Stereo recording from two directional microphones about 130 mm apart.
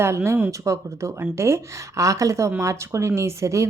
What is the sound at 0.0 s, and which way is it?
Speech, 20° right (ahead or behind).